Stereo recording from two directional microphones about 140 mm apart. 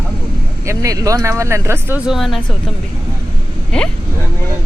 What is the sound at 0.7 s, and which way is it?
Speech, 25° right (ahead or behind).